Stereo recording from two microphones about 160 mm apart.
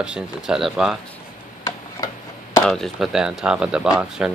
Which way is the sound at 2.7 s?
Centre (ahead or behind).